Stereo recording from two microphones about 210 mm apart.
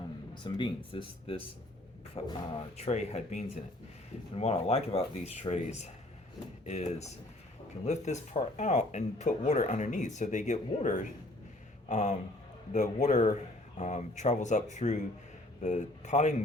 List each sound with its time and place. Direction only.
0.3 s speech: 25° left (ahead or behind)